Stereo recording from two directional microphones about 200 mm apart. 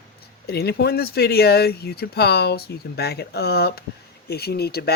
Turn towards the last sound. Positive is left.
turn(degrees=50)  # may be behind; listen again after turning